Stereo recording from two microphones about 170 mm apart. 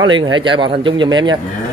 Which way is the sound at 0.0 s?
30° right (ahead or behind).